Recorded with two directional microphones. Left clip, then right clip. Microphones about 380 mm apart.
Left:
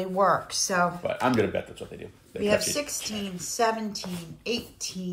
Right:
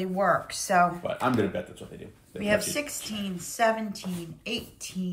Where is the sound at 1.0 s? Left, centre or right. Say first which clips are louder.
Left 2 dB; left.